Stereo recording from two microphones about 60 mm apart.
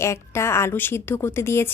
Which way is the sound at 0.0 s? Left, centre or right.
Left.